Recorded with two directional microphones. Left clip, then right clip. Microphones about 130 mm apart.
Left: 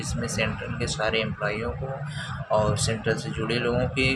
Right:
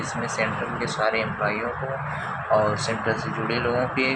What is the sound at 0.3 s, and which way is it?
Speech, 50° left (ahead or behind).